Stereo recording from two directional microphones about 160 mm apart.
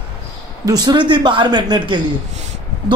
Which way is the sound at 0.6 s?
25° right (ahead or behind).